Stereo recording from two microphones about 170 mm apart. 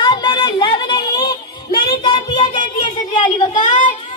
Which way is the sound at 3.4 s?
45° left (ahead or behind).